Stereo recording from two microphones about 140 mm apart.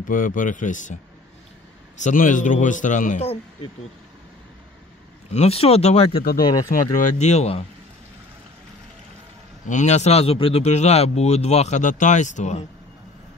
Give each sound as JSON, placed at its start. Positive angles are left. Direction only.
{"t": 0.0, "sound": "speech", "side_deg": 75}
{"t": 2.0, "sound": "a man's voice", "side_deg": 65}
{"t": 5.3, "sound": "speech", "side_deg": 50}
{"t": 6.4, "sound": "speech", "side_deg": 30}
{"t": 6.7, "sound": "a man's voice", "side_deg": 70}
{"t": 9.7, "sound": "speech", "side_deg": 55}